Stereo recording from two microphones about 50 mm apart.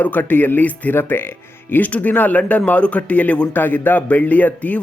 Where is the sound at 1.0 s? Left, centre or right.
Left.